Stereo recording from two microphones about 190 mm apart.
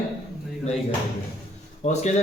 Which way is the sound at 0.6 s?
35° left (ahead or behind).